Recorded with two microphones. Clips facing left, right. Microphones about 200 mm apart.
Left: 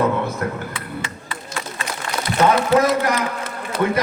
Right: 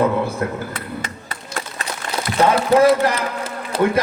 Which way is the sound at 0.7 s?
40° right (ahead or behind).